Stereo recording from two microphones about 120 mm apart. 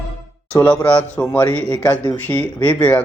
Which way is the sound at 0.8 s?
10° left (ahead or behind).